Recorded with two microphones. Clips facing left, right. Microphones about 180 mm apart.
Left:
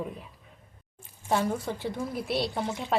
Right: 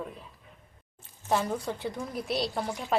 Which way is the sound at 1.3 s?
5° left (ahead or behind).